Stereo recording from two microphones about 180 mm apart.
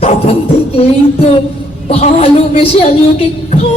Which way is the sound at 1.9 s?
35° left (ahead or behind).